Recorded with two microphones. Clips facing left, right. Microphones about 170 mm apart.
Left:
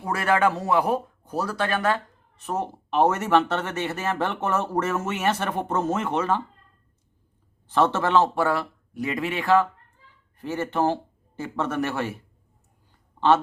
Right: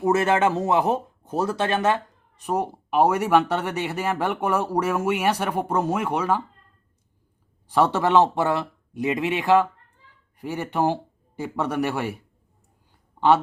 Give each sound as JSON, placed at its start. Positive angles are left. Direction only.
{"t": 0.0, "sound": "speech", "side_deg": -25}
{"t": 7.7, "sound": "a man's voice", "side_deg": -10}